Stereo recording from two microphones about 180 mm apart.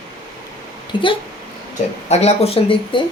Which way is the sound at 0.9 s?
25° left (ahead or behind).